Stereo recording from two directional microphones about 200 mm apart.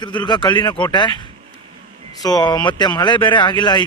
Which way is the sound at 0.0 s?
20° left (ahead or behind).